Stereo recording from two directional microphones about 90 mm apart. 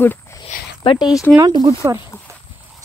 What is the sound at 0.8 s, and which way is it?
Speech, 65° left (ahead or behind).